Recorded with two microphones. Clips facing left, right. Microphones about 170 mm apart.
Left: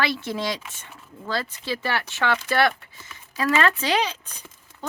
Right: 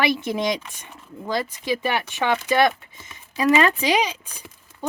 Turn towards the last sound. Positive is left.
turn(degrees=-10)  # may be behind; listen again after turning